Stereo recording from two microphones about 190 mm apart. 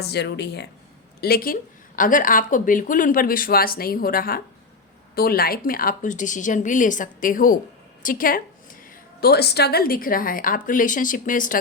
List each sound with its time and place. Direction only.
0.0 s a woman's voice: 60° left (ahead or behind)
9.2 s a woman's voice: 60° left (ahead or behind)